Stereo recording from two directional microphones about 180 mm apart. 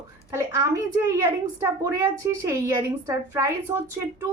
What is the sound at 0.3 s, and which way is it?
A woman's voice, 15° right (ahead or behind).